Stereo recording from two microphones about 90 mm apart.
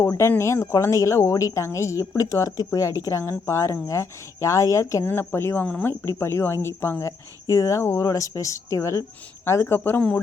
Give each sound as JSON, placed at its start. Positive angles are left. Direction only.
{"t": 0.0, "sound": "speech", "side_deg": 30}
{"t": 8.0, "sound": "speech", "side_deg": 45}